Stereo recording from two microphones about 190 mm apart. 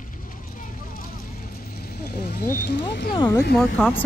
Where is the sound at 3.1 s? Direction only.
15° left (ahead or behind).